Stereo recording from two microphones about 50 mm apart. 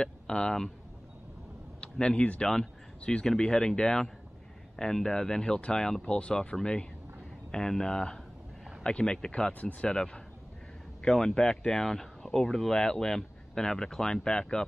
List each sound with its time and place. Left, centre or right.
0.0 s speech: centre
1.8 s speech: centre
9.5 s speech: left
9.8 s speech: centre